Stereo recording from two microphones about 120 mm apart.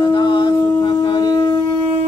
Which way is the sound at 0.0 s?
40° left (ahead or behind).